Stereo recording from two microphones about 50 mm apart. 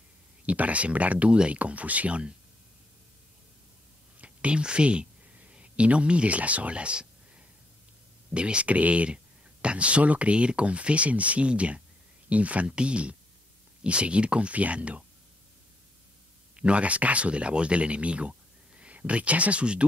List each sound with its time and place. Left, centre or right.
0.5 s speech: right
4.2 s speech: right
8.3 s speech: right
16.5 s speech: right